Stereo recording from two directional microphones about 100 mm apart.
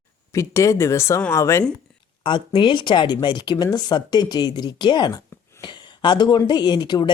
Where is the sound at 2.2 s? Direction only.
55° left (ahead or behind).